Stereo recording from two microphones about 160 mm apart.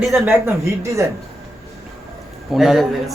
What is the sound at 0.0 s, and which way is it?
Speech, 5° right (ahead or behind).